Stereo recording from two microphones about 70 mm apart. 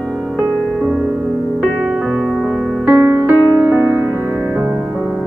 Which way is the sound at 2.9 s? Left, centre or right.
Right.